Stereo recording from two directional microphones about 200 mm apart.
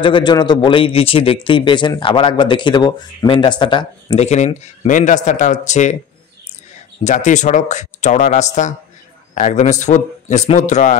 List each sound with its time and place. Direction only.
0.0 s a man's voice: 25° left (ahead or behind)
7.0 s speech: 35° left (ahead or behind)